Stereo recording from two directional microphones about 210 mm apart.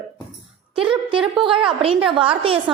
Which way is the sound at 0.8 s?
5° right (ahead or behind).